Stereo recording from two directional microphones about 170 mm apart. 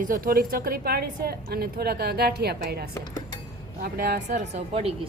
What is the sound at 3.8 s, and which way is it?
Speech, 60° right (ahead or behind).